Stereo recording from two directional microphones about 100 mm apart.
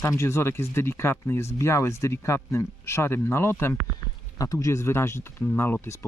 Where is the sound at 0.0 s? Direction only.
25° left (ahead or behind).